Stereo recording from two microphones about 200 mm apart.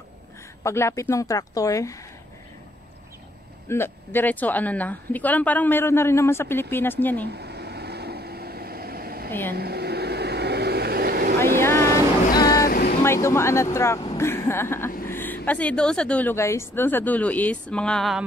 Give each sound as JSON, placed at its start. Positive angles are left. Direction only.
{"t": 0.7, "sound": "speech", "side_deg": 15}
{"t": 3.6, "sound": "speech", "side_deg": 10}
{"t": 7.2, "sound": "vehicle", "side_deg": -55}
{"t": 11.3, "sound": "vehicle", "side_deg": 10}
{"t": 12.4, "sound": "vehicle", "side_deg": 50}
{"t": 13.0, "sound": "speech", "side_deg": 15}